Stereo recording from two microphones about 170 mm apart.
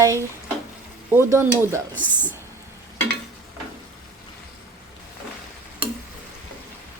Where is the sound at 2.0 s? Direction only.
10° left (ahead or behind).